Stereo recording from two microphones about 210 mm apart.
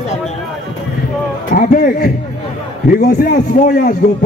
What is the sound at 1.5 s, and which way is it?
A man's voice, 40° left (ahead or behind).